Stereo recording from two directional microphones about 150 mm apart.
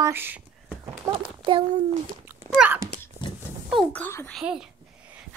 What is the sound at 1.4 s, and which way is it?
Speech, 30° right (ahead or behind).